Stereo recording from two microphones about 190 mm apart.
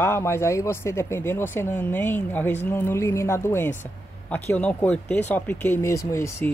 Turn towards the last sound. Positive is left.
turn(degrees=15)  # may be behind; listen again after turning